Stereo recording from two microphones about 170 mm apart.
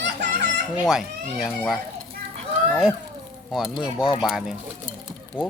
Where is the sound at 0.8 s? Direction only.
Centre (ahead or behind).